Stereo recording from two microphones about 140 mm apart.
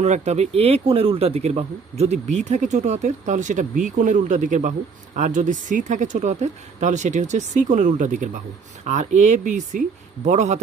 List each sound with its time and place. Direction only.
0.0 s speech: 55° right (ahead or behind)